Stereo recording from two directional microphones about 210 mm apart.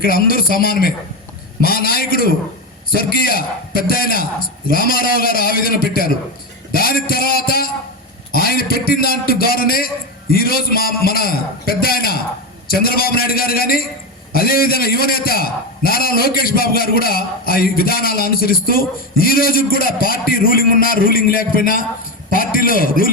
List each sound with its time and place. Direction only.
0.0 s a man's voice: 45° left (ahead or behind)